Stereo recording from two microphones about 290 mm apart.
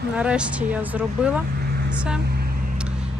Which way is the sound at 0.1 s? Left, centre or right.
Centre.